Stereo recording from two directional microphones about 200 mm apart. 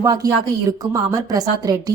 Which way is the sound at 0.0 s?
15° right (ahead or behind).